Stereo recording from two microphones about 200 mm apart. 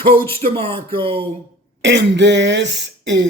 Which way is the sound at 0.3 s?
30° right (ahead or behind).